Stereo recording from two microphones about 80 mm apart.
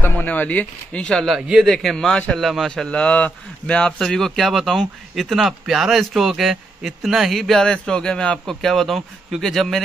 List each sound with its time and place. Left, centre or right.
0.0 s speech: left
1.3 s speech: centre
2.3 s a man's voice: centre